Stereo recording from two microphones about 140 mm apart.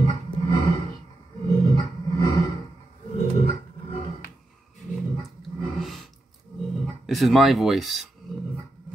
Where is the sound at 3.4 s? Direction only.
50° left (ahead or behind).